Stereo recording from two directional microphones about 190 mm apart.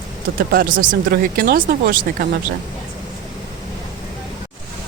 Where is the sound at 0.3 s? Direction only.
50° right (ahead or behind).